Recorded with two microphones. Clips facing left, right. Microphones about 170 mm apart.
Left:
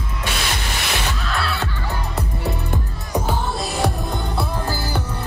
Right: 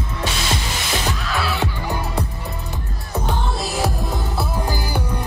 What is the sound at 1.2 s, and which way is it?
Music, centre (ahead or behind).